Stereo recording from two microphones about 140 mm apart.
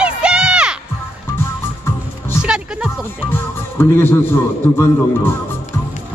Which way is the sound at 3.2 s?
15° left (ahead or behind).